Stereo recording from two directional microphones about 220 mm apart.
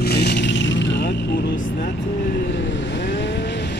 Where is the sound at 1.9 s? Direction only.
35° left (ahead or behind).